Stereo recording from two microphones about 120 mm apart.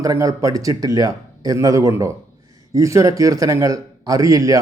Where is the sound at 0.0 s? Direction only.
30° right (ahead or behind).